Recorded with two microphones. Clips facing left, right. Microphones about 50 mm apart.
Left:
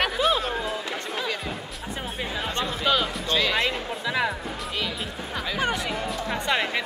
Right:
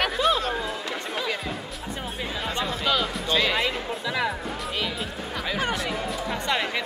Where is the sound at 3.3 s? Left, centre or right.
Centre.